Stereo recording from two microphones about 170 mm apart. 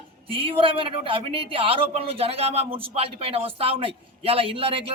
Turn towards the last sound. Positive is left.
turn(degrees=-35)  # may be behind; listen again after turning